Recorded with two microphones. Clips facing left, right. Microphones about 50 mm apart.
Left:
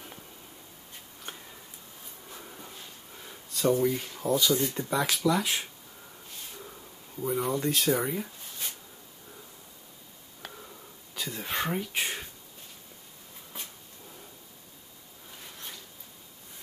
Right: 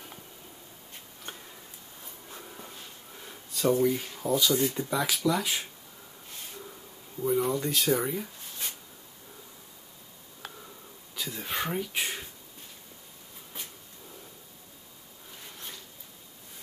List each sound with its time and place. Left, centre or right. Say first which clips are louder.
2.4 s dog: right 1 dB; centre
3.2 s speech: even; centre
6.5 s a sound: right 1 dB; centre
8.0 s speech: even; centre
11.1 s speech: left 1 dB; centre